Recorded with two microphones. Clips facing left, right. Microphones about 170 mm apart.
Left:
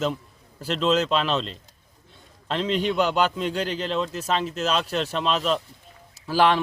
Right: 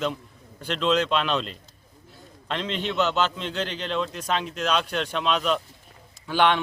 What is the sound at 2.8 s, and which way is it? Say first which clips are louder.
A man's voice: even; 10° left (ahead or behind).